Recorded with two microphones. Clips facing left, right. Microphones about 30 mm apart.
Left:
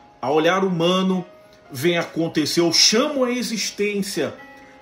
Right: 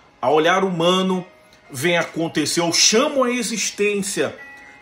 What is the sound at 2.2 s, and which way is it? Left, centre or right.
Speech, left.